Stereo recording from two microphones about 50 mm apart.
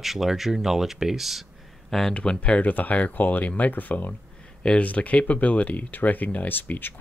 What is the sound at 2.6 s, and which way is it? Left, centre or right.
Speech, left.